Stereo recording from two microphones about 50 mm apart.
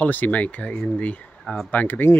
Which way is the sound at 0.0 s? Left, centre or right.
Left.